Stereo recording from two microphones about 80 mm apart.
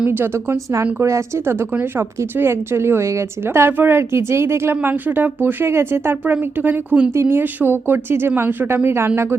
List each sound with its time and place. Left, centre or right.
0.0 s speech: right
7.1 s speech: right